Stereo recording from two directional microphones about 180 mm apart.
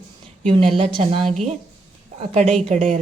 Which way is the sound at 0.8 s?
30° right (ahead or behind).